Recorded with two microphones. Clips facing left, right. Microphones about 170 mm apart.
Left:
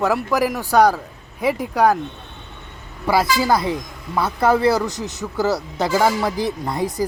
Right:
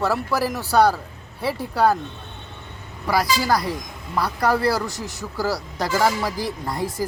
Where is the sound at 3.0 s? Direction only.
25° left (ahead or behind).